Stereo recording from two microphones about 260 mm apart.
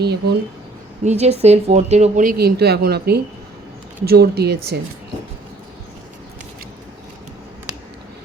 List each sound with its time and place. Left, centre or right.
0.0 s speech: right
1.0 s speech: right